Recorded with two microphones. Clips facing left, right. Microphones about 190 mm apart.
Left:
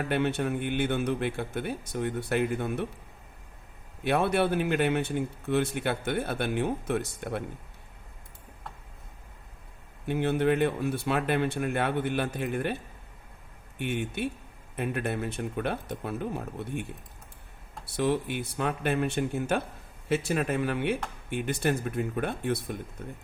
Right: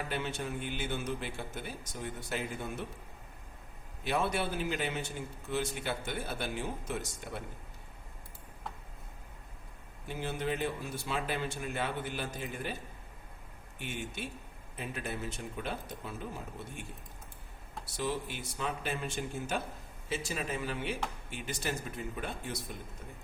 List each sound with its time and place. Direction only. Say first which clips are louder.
0.1 s a man's voice: left 9 dB; 60° left (ahead or behind)
4.0 s a man's voice: left 7 dB; 60° left (ahead or behind)
10.1 s a man's voice: left 10 dB; 60° left (ahead or behind)
13.7 s a man's voice: left 9 dB; 60° left (ahead or behind)
17.8 s a man's voice: left 8 dB; 60° left (ahead or behind)